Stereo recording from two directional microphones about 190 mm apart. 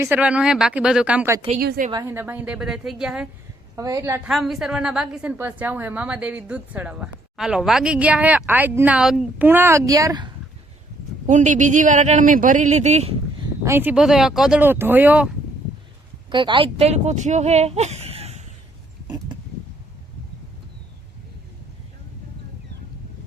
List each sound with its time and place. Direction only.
0.0 s a woman's voice: 10° right (ahead or behind)
1.5 s a woman's voice: 50° right (ahead or behind)
1.9 s a woman's voice: 15° right (ahead or behind)
3.8 s a woman's voice: 15° right (ahead or behind)
4.3 s a woman's voice: centre (ahead or behind); by 10.3 s 20° right (ahead or behind)
11.3 s speech: 40° right (ahead or behind)
13.7 s a woman's voice: 10° right (ahead or behind)
16.3 s speech: 25° right (ahead or behind)